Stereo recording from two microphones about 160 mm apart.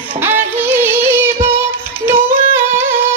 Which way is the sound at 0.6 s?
15° right (ahead or behind).